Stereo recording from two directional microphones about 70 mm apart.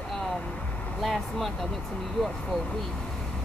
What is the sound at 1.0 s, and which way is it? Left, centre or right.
Speech, centre.